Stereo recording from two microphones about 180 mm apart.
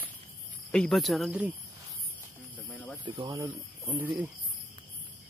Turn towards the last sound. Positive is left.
turn(degrees=-15)  # may be behind; listen again after turning